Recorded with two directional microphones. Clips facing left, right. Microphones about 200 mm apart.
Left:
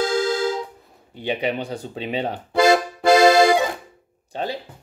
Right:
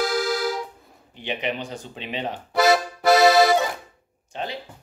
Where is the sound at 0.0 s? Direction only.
25° left (ahead or behind).